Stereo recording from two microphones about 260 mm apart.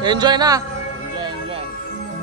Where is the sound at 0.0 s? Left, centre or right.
Centre.